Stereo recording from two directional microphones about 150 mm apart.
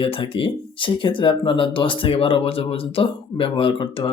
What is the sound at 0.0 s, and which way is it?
Speech, 35° left (ahead or behind).